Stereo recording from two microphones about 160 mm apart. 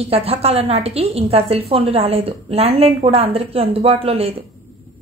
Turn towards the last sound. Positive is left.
turn(degrees=-40)  # may be behind; listen again after turning